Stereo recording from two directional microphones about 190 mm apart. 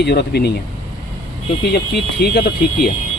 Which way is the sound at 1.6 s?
55° left (ahead or behind).